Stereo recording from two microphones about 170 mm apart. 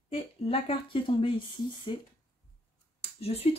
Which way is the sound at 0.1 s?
35° left (ahead or behind).